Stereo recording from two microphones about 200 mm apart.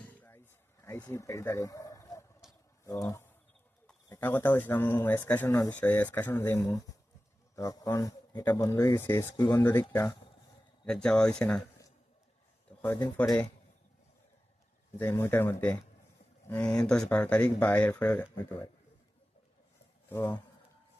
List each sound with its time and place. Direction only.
0.0 s a sound: 10° left (ahead or behind)
0.9 s speech: 10° left (ahead or behind)
10.8 s speech: 5° left (ahead or behind)
12.8 s speech: 10° left (ahead or behind)
14.9 s speech: 10° left (ahead or behind)
20.1 s speech: 10° left (ahead or behind)